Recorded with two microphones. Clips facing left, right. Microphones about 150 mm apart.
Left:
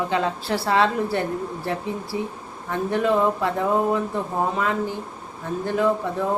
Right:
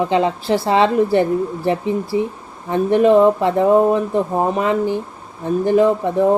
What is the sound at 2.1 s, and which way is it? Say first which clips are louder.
Speech: right 8 dB; 70° right (ahead or behind).